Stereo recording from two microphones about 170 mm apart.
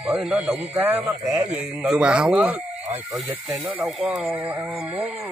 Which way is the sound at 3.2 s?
5° right (ahead or behind).